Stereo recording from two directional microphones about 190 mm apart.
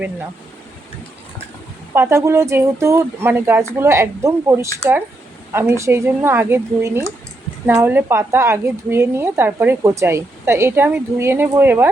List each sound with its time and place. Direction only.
1.9 s speech: 15° right (ahead or behind)